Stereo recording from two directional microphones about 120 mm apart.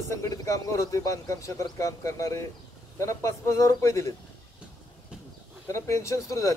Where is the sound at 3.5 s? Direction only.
25° left (ahead or behind).